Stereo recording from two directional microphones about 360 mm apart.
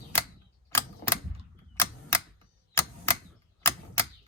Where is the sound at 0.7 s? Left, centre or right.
Centre.